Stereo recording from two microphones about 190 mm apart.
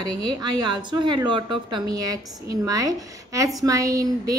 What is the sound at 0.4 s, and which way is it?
A woman's voice, 25° right (ahead or behind).